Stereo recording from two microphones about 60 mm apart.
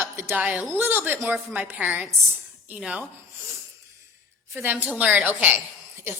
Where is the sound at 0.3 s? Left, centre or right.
Right.